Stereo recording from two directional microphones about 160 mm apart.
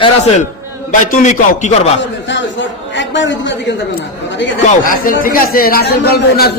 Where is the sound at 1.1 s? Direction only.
50° left (ahead or behind).